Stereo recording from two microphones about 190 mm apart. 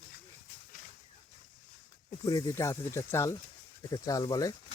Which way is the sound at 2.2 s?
20° left (ahead or behind).